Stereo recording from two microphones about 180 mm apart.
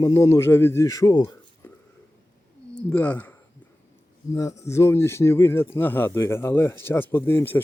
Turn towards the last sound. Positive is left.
turn(degrees=10)  # may be behind; listen again after turning